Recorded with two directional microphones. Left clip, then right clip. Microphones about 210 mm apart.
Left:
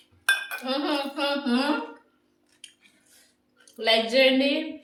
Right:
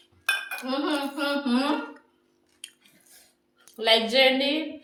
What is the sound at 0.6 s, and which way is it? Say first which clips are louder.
Cutlery: left 1 dB; 35° left (ahead or behind).